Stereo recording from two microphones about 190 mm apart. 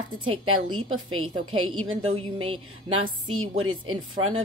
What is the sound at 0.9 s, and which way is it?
Speech, 90° right.